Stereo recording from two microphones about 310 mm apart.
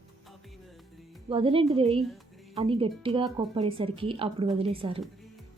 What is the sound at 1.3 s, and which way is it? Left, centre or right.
Speech, centre.